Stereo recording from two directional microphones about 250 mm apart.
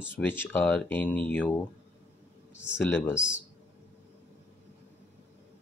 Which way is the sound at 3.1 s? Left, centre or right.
Centre.